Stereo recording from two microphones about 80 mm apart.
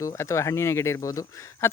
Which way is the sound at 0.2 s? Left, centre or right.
Left.